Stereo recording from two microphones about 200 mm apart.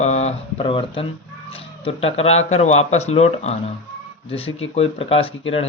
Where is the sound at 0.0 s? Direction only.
35° left (ahead or behind).